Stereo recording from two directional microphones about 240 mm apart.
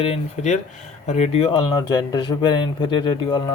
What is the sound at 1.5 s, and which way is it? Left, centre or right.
Speech, centre.